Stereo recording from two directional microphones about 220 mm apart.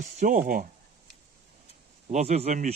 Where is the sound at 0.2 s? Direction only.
40° right (ahead or behind).